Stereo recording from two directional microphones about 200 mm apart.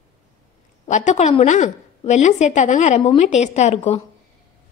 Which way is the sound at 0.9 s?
35° left (ahead or behind).